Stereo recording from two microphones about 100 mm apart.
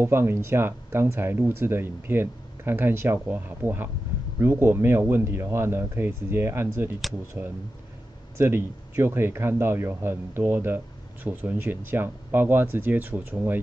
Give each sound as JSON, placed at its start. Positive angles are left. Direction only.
{"t": 0.0, "sound": "speech", "side_deg": -25}
{"t": 8.4, "sound": "speech", "side_deg": -25}